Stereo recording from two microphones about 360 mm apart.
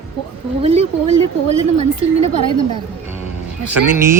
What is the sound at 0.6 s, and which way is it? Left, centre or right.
Speech, centre.